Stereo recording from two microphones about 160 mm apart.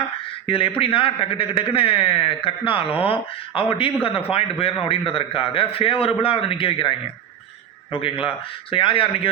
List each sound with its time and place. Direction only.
0.4 s a man's voice: 35° left (ahead or behind)
7.9 s a man's voice: 35° left (ahead or behind)